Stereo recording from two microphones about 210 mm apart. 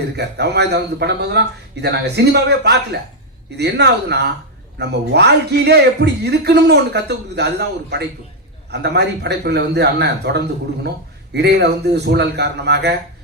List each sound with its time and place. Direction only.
0.2 s a man's voice: 50° right (ahead or behind)